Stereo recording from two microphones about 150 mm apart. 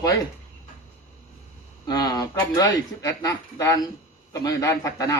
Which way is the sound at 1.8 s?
25° left (ahead or behind).